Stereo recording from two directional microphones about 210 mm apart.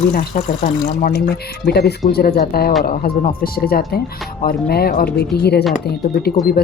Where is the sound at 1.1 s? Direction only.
50° left (ahead or behind).